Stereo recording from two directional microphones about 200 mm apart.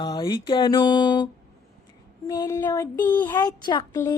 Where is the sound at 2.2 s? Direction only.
15° left (ahead or behind).